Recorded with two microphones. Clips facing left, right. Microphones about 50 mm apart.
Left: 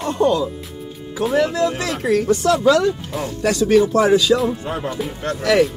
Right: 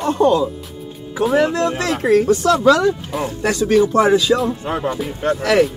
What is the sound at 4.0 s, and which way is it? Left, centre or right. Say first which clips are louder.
Speech: even; centre.